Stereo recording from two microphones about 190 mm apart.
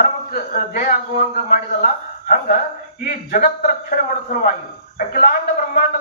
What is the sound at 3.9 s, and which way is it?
A man's voice, 50° left (ahead or behind).